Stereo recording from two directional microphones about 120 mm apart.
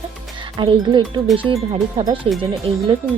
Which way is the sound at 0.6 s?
40° right (ahead or behind).